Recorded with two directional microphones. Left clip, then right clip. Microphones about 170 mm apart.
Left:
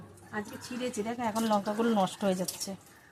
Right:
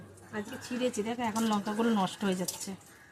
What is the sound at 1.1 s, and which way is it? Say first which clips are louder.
Speech: left 2 dB; 15° left (ahead or behind).